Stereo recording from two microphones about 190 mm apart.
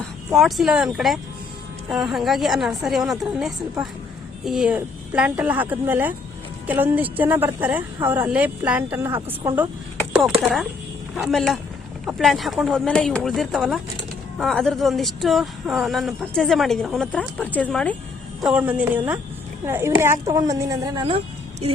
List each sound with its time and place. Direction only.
0.3 s speech: centre (ahead or behind)
10.2 s a woman's voice: centre (ahead or behind); by 21.2 s 20° right (ahead or behind)